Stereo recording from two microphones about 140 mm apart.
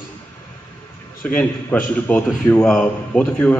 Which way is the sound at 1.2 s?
10° left (ahead or behind).